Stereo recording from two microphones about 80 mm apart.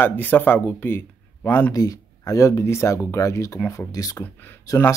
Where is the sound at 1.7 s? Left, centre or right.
Left.